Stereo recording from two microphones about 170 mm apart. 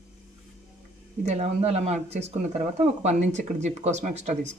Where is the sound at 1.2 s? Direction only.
40° right (ahead or behind).